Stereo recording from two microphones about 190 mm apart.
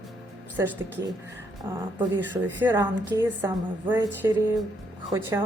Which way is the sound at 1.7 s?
10° right (ahead or behind).